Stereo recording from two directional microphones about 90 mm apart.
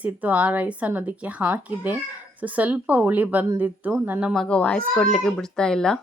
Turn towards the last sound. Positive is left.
turn(degrees=5)  # may be behind; listen again after turning